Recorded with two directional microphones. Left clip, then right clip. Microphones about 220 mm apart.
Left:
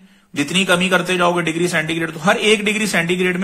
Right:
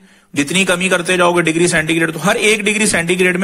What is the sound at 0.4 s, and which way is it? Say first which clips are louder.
A man's voice: right 2 dB; 35° right (ahead or behind).